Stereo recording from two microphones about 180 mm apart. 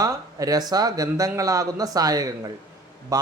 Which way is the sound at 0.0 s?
20° right (ahead or behind).